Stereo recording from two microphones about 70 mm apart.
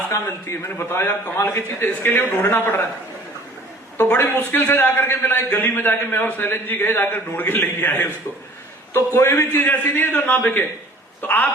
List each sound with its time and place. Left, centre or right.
0.1 s a man's voice: left
4.2 s a man's voice: left
9.1 s a man's voice: left